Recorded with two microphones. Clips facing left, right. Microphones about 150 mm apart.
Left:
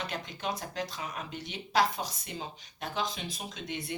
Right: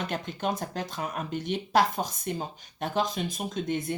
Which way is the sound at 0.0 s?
50° right (ahead or behind).